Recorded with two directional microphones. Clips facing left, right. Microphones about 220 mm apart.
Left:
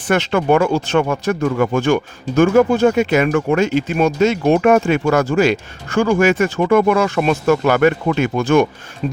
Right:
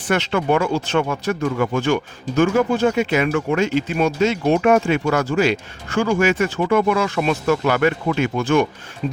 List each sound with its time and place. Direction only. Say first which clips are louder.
0.1 s speech: left 4 dB; 50° left (ahead or behind)